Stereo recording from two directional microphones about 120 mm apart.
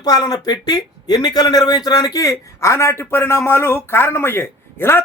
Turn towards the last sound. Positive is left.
turn(degrees=20)  # may be behind; listen again after turning